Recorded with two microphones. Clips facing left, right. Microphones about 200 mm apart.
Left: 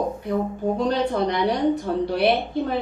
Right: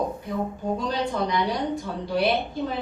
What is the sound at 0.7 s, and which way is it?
A woman's voice, 60° left (ahead or behind).